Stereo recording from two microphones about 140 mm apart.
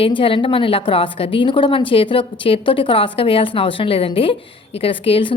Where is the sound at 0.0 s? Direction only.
40° left (ahead or behind).